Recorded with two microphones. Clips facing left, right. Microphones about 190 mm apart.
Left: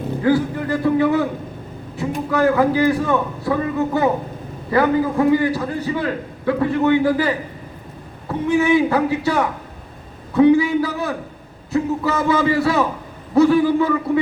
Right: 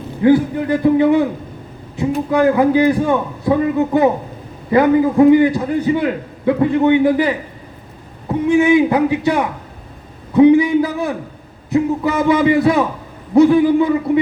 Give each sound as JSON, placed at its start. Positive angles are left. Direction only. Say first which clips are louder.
{"t": 0.2, "sound": "a man's voice", "louder": "right 6 dB", "side_deg": -20}